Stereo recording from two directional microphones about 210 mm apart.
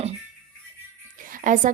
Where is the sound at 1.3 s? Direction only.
40° right (ahead or behind).